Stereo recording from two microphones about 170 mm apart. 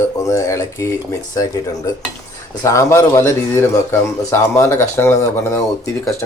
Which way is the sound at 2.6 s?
20° left (ahead or behind).